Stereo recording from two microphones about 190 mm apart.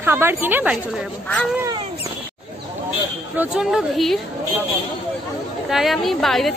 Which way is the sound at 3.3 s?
5° right (ahead or behind).